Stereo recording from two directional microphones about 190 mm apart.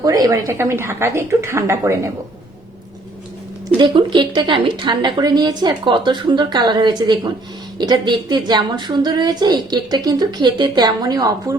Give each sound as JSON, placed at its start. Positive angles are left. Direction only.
{"t": 0.0, "sound": "a woman's voice", "side_deg": -20}
{"t": 3.8, "sound": "a woman's voice", "side_deg": -25}